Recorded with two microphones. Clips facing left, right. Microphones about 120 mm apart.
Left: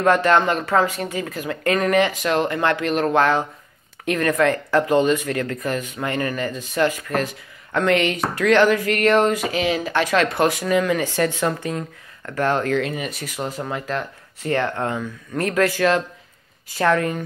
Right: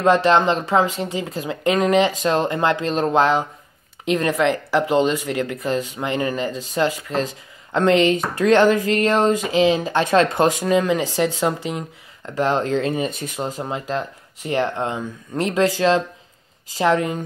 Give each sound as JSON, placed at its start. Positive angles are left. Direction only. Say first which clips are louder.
{"t": 0.0, "sound": "speech", "louder": "right 1 dB", "side_deg": -20}